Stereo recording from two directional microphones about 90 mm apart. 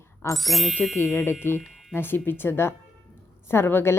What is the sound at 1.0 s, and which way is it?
A woman's voice, 25° left (ahead or behind).